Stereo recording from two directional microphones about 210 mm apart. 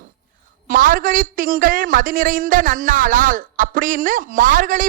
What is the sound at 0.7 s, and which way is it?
A man's voice, 40° right (ahead or behind).